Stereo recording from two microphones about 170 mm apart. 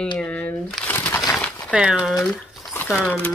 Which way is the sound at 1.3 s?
Centre (ahead or behind).